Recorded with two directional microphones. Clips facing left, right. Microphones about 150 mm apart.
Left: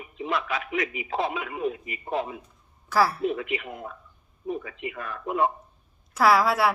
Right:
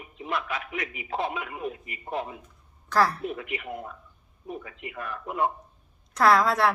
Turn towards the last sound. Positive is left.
turn(degrees=5)  # may be behind; listen again after turning